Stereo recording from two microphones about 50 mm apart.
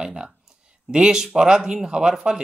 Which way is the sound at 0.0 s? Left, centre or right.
Centre.